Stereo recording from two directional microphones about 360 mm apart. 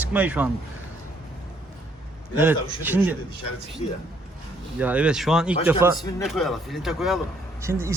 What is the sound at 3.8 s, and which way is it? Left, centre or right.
Speech, centre.